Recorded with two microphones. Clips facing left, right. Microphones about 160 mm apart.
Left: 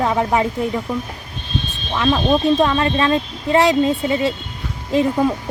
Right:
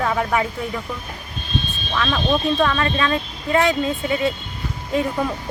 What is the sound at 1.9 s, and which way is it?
Speech, 20° left (ahead or behind).